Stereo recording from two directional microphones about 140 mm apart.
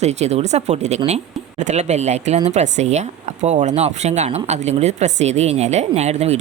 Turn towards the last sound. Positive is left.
turn(degrees=-50)  # may be behind; listen again after turning